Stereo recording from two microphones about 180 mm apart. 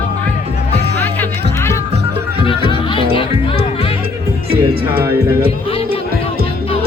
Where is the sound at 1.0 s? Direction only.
10° left (ahead or behind).